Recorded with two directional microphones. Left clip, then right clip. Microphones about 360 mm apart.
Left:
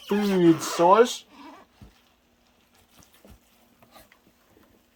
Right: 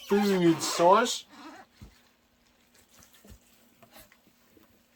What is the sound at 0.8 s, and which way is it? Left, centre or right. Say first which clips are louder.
Speech: left 3 dB; left.